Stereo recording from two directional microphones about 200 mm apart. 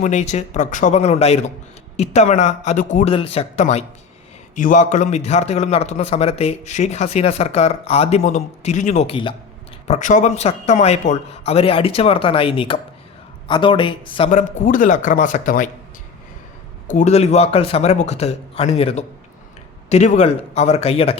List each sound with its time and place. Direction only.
0.0 s a man's voice: 35° left (ahead or behind)
14.3 s a man's voice: 40° left (ahead or behind)
16.8 s a man's voice: 35° left (ahead or behind)